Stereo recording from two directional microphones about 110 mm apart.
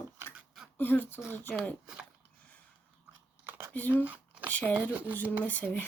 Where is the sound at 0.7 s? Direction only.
15° left (ahead or behind).